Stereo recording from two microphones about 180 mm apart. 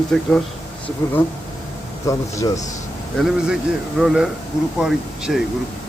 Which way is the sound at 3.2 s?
5° right (ahead or behind).